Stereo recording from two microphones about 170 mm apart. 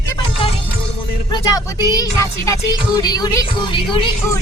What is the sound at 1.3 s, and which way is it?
Music, 20° left (ahead or behind).